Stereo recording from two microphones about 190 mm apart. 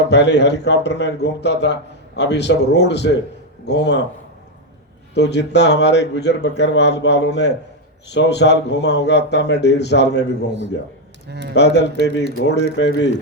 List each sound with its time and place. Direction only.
0.1 s a man's voice: 65° left (ahead or behind)
5.1 s a man's voice: 65° left (ahead or behind)
11.3 s speech: 60° right (ahead or behind)
11.5 s a man's voice: 65° left (ahead or behind)